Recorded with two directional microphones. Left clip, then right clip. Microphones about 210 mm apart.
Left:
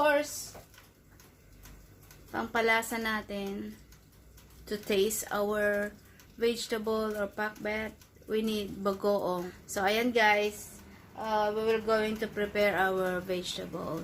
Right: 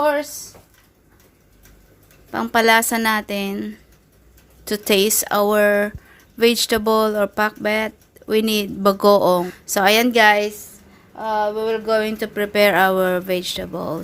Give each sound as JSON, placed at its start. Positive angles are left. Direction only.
{"t": 2.3, "sound": "speech", "side_deg": -50}